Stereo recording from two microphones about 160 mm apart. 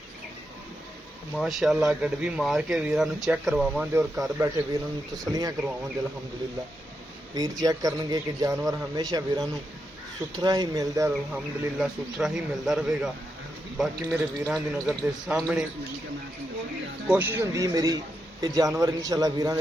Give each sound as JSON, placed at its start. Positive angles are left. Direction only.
{"t": 1.4, "sound": "speech", "side_deg": 0}
{"t": 3.9, "sound": "a man's voice", "side_deg": -15}
{"t": 7.3, "sound": "a man's voice", "side_deg": -25}
{"t": 11.3, "sound": "speech", "side_deg": -5}
{"t": 17.1, "sound": "a man's voice", "side_deg": -10}